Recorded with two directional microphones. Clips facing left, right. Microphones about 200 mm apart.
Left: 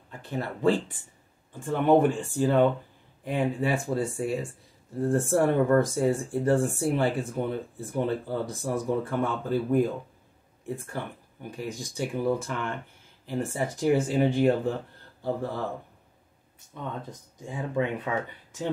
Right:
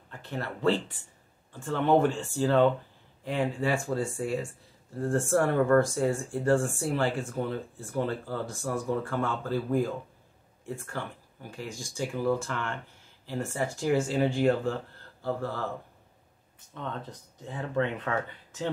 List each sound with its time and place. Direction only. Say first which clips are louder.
0.2 s speech: left 3 dB; 10° left (ahead or behind)
11.0 s speech: left 2 dB; 15° left (ahead or behind)
17.4 s speech: left 1 dB; 10° left (ahead or behind)